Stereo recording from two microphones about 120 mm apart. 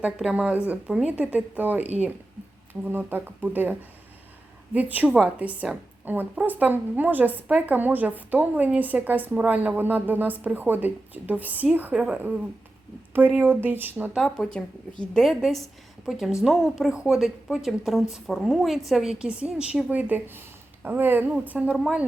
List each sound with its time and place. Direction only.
0.0 s a woman's voice: 10° right (ahead or behind)
14.2 s a woman's voice: 5° left (ahead or behind); by 21.8 s 15° right (ahead or behind)